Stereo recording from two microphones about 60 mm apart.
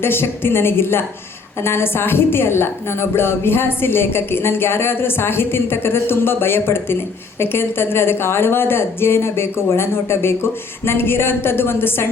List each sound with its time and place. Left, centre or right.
0.0 s a woman's voice: left